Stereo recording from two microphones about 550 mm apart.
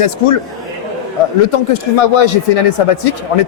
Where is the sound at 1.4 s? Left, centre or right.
Left.